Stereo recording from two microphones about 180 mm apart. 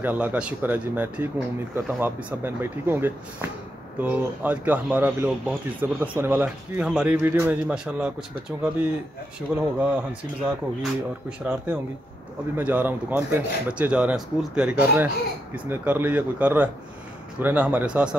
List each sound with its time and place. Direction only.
0.0 s speech: 10° right (ahead or behind)